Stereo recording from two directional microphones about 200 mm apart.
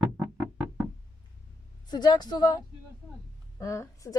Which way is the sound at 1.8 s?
20° left (ahead or behind).